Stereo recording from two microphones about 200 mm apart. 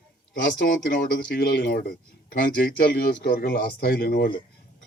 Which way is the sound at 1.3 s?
50° left (ahead or behind).